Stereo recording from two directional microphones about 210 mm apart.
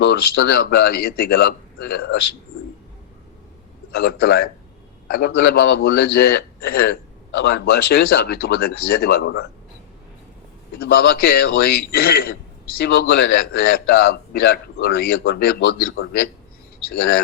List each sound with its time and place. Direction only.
0.0 s a man's voice: 50° left (ahead or behind)
3.9 s a man's voice: 50° left (ahead or behind)
10.8 s a man's voice: 50° left (ahead or behind)